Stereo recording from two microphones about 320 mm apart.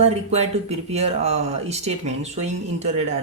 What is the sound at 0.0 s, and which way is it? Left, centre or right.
Speech, centre.